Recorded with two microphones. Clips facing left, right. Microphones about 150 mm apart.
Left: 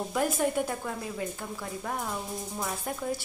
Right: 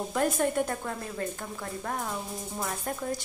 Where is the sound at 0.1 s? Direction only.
5° left (ahead or behind).